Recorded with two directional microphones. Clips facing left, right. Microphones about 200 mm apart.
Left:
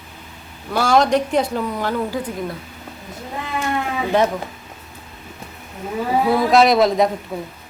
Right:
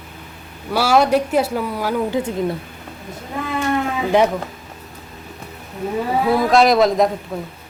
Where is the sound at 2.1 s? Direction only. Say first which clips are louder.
Right 4 dB; 25° right (ahead or behind).